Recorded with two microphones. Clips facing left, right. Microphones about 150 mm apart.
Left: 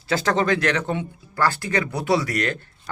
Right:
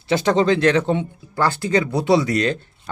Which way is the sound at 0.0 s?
20° right (ahead or behind).